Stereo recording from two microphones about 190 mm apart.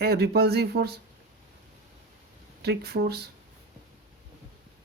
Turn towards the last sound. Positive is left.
turn(degrees=-55)  # may be behind; listen again after turning